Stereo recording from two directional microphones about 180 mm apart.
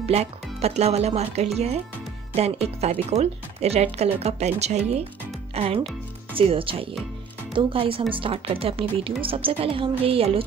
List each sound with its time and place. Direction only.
0.0 s speech: 35° right (ahead or behind)